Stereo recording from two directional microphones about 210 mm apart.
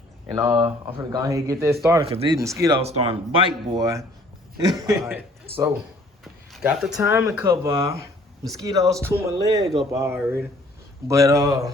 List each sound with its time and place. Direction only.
0.3 s speech: 15° right (ahead or behind)
2.0 s speech: 25° right (ahead or behind)
2.8 s a man's voice: 30° right (ahead or behind); by 5.6 s 10° right (ahead or behind)
6.2 s a sound: centre (ahead or behind)
7.1 s speech: 10° right (ahead or behind)